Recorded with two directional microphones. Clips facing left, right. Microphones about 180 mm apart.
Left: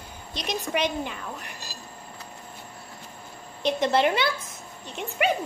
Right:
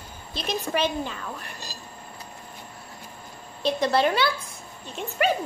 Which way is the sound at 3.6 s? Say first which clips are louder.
Even; 20° left (ahead or behind).